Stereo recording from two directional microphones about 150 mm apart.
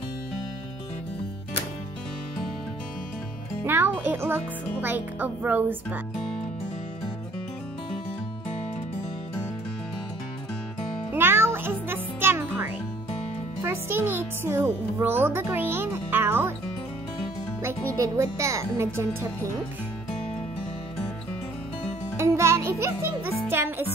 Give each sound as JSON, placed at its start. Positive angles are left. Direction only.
{"t": 3.6, "sound": "music", "side_deg": -15}
{"t": 4.8, "sound": "speech", "side_deg": -10}
{"t": 11.1, "sound": "music", "side_deg": -15}
{"t": 17.6, "sound": "speech", "side_deg": -15}
{"t": 22.1, "sound": "music", "side_deg": -15}
{"t": 23.5, "sound": "speech", "side_deg": -15}